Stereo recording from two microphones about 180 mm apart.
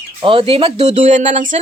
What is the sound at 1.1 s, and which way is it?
Speech, 45° right (ahead or behind).